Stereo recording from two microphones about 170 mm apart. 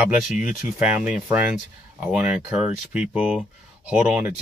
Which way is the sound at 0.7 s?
10° right (ahead or behind).